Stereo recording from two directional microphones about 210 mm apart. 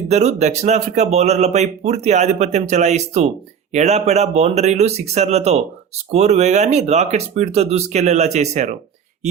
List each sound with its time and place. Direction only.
0.1 s speech: 30° right (ahead or behind)